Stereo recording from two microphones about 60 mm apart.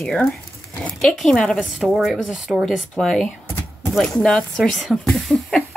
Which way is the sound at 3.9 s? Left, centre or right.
Centre.